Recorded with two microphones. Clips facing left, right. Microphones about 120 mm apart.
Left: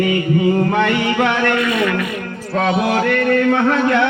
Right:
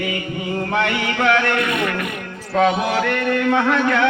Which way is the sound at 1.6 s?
60° right (ahead or behind).